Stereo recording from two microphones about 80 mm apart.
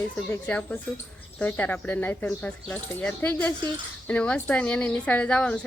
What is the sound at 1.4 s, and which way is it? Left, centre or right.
Speech, left.